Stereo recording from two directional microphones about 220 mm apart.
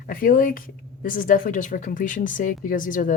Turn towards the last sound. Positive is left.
turn(degrees=35)  # may be behind; listen again after turning